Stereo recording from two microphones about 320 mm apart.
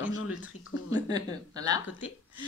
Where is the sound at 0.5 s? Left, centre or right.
Left.